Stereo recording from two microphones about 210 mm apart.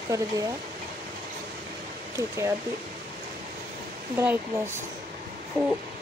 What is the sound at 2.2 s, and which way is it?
Speech, 15° right (ahead or behind).